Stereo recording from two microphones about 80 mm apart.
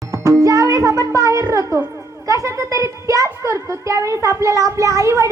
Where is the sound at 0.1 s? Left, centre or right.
Right.